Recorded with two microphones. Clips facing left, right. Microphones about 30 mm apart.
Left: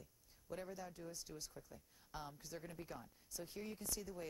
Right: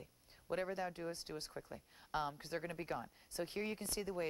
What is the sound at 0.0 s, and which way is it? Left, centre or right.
Speech, right.